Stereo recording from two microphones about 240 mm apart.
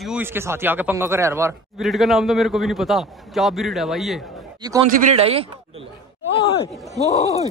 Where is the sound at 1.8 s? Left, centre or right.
Centre.